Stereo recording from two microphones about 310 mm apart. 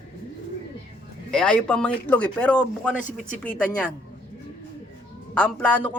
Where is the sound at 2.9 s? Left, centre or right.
Left.